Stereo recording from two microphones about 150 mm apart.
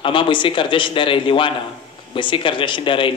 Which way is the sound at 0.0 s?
35° left (ahead or behind).